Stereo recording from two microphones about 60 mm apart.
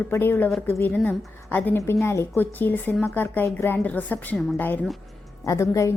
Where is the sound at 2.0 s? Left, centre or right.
Left.